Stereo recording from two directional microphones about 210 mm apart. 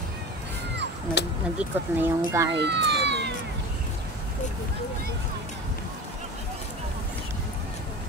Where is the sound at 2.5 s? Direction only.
55° right (ahead or behind).